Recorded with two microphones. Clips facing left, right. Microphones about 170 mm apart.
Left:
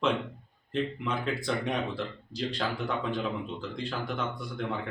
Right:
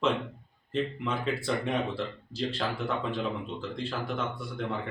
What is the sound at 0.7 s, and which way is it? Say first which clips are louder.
Speech: even; 5° right (ahead or behind).